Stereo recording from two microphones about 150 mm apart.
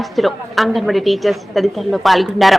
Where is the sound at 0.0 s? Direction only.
Centre (ahead or behind).